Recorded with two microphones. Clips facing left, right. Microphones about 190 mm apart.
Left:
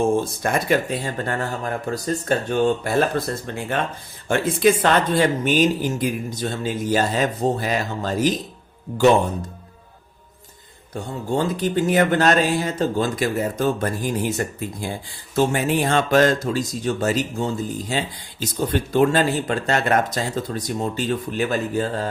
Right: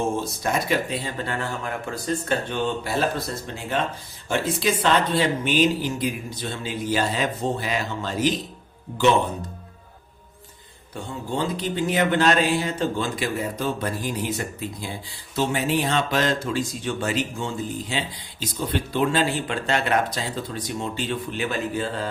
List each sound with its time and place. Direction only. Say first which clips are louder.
0.2 s speech: left 3 dB; 50° left (ahead or behind)
10.9 s speech: left 5 dB; 45° left (ahead or behind)